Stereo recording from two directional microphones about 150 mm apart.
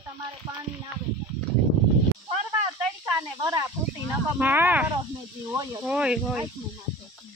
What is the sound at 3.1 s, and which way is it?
Snake, 20° right (ahead or behind).